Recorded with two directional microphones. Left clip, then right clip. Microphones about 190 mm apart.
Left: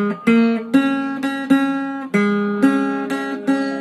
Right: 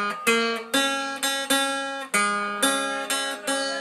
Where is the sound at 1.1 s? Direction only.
20° right (ahead or behind).